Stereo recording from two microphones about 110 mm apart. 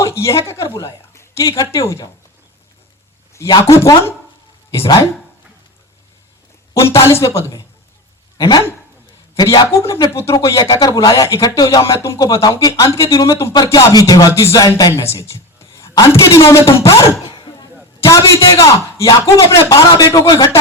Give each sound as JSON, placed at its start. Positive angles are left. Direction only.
{"t": 0.0, "sound": "a woman's voice", "side_deg": 25}
{"t": 3.7, "sound": "a man's voice", "side_deg": 25}
{"t": 6.7, "sound": "a man's voice", "side_deg": 25}
{"t": 9.4, "sound": "a man's voice", "side_deg": 35}
{"t": 17.3, "sound": "a sound", "side_deg": 45}
{"t": 18.0, "sound": "a man's voice", "side_deg": 30}